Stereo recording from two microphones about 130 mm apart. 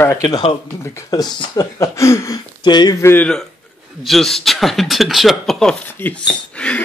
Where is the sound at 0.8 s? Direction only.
20° left (ahead or behind).